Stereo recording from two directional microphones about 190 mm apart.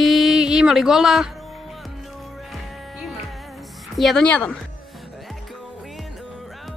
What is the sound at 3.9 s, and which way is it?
Speech, centre (ahead or behind).